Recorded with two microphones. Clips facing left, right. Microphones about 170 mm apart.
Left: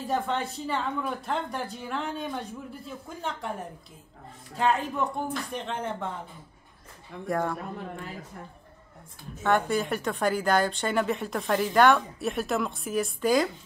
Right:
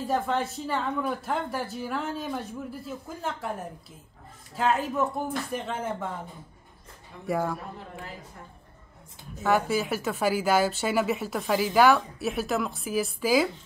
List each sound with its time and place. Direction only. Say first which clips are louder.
0.0 s speech: right 2 dB; centre (ahead or behind)
4.6 s speech: right 1 dB; centre (ahead or behind)
7.2 s speech: even; 5° right (ahead or behind)
9.4 s speech: even; 5° right (ahead or behind)